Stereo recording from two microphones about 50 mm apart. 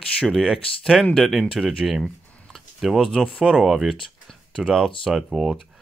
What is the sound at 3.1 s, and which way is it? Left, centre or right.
Speech, centre.